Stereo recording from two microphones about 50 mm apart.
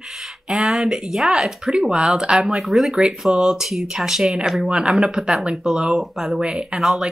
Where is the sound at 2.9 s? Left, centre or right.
Centre.